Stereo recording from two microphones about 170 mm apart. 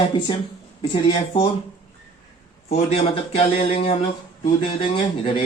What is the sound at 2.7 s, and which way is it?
A man's voice, 35° left (ahead or behind).